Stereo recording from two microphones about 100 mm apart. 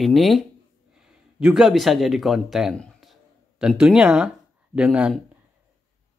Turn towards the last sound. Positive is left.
turn(degrees=-10)  # may be behind; listen again after turning